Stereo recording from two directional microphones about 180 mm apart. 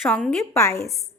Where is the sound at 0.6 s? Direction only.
15° left (ahead or behind).